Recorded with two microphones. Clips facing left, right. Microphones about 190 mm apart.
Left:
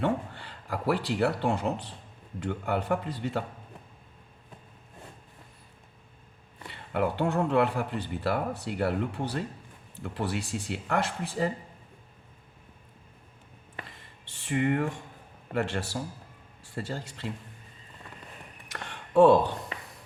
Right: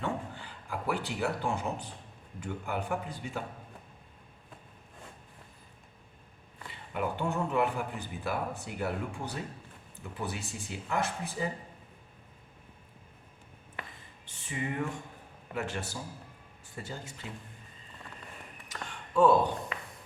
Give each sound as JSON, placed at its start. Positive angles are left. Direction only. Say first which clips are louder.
{"t": 0.0, "sound": "speech", "louder": "left 6 dB", "side_deg": 65}
{"t": 6.7, "sound": "speech", "louder": "left 5 dB", "side_deg": 70}
{"t": 14.4, "sound": "a man's voice", "louder": "left 8 dB", "side_deg": 65}
{"t": 18.7, "sound": "a sound", "louder": "left 6 dB", "side_deg": 70}